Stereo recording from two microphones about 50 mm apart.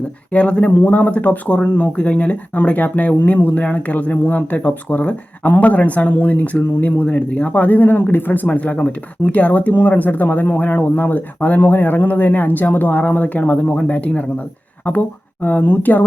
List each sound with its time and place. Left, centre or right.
0.3 s speech: left
15.4 s speech: left